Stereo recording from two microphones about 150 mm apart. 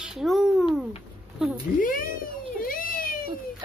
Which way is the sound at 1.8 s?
70° left (ahead or behind).